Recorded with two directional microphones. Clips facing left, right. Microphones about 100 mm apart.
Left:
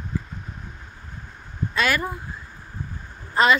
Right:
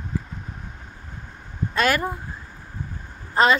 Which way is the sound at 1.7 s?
45° right (ahead or behind).